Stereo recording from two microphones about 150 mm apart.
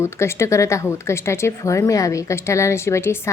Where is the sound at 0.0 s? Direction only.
20° left (ahead or behind).